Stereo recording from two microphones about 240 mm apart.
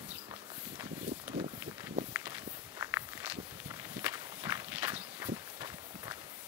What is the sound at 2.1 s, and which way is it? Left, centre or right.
Walk, centre.